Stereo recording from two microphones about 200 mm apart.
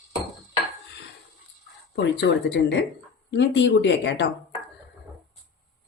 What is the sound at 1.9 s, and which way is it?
Speech, 60° left (ahead or behind).